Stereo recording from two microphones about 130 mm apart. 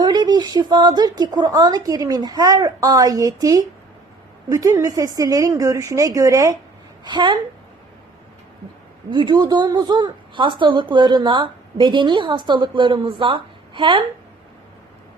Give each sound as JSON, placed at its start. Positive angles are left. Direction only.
{"t": 0.0, "sound": "a woman's voice", "side_deg": -35}
{"t": 7.0, "sound": "a woman's voice", "side_deg": -35}
{"t": 9.0, "sound": "a woman's voice", "side_deg": -40}